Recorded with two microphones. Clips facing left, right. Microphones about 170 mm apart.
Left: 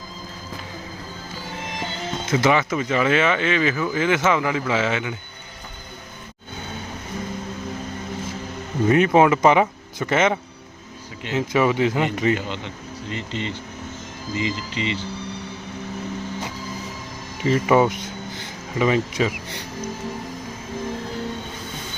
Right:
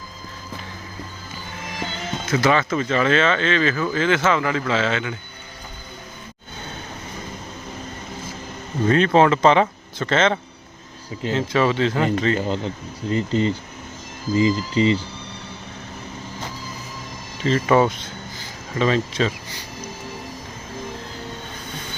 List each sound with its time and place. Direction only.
1.8 s speech: 20° left (ahead or behind)
8.9 s speech: 15° left (ahead or behind)
12.5 s speech: 35° right (ahead or behind)
17.4 s speech: 15° left (ahead or behind)